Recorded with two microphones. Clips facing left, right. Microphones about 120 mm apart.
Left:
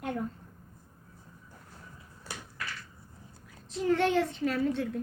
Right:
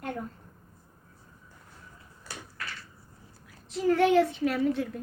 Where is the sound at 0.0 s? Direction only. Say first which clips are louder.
Left 2 dB; centre (ahead or behind).